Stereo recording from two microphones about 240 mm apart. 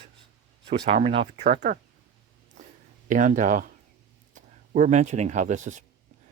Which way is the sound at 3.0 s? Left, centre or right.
Right.